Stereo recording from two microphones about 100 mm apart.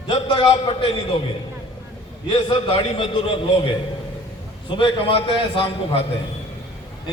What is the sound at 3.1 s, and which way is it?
Speech, 60° left (ahead or behind).